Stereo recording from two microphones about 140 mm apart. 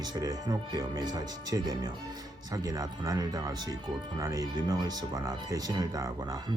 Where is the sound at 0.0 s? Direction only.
25° right (ahead or behind).